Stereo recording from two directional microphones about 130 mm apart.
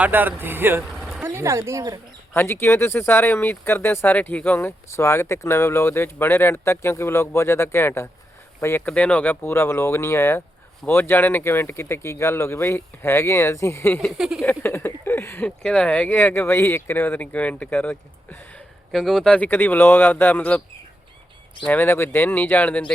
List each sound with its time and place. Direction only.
0.0 s speech: 15° right (ahead or behind)
0.9 s vehicle: centre (ahead or behind)
1.2 s speech: 20° right (ahead or behind)
2.3 s speech: 15° left (ahead or behind)
14.0 s speech: 5° right (ahead or behind)
14.6 s speech: 15° left (ahead or behind)
18.9 s speech: centre (ahead or behind)
21.6 s speech: 15° left (ahead or behind)